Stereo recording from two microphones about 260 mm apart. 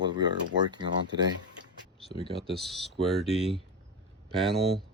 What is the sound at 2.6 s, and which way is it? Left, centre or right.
Speech, centre.